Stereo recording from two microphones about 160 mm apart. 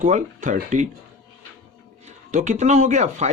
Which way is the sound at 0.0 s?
50° right (ahead or behind).